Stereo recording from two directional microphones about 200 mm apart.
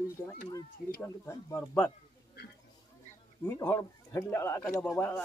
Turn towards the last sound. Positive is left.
turn(degrees=5)  # may be behind; listen again after turning